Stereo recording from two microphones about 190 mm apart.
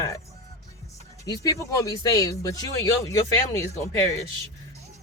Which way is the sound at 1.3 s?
20° left (ahead or behind).